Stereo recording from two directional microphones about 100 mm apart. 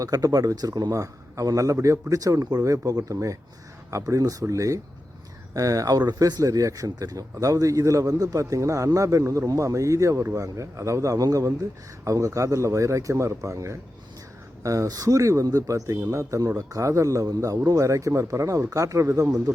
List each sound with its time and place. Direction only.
0.0 s speech: 35° right (ahead or behind)